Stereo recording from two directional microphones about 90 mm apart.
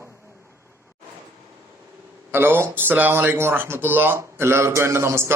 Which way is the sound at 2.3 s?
25° right (ahead or behind).